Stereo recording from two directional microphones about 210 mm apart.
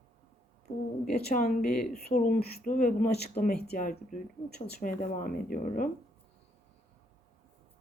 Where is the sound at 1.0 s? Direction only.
45° left (ahead or behind).